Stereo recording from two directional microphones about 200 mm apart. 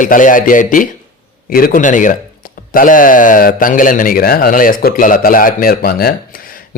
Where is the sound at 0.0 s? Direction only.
40° left (ahead or behind).